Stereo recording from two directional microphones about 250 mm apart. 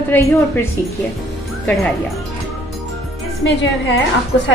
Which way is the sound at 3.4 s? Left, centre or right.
Left.